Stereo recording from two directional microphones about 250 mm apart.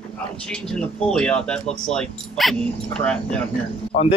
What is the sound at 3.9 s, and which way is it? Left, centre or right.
Speech, left.